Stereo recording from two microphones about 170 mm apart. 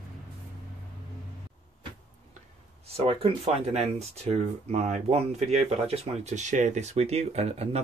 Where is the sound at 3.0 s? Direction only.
35° right (ahead or behind).